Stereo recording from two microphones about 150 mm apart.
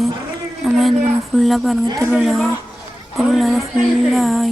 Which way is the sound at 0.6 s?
Centre (ahead or behind).